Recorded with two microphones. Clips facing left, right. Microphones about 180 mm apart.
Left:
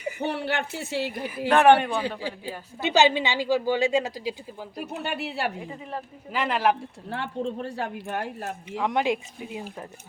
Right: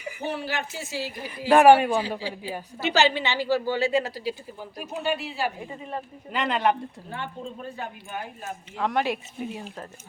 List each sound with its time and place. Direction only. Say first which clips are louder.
0.2 s speech: left 1 dB; 65° left (ahead or behind)
1.5 s speech: right 2 dB; 10° right (ahead or behind)
2.8 s a woman's voice: left 2 dB; 15° left (ahead or behind)
4.8 s speech: right 3 dB; 65° left (ahead or behind)
6.3 s speech: even; 5° left (ahead or behind)
7.1 s speech: left 7 dB; 80° left
8.7 s a woman's voice: left 1 dB; 15° left (ahead or behind)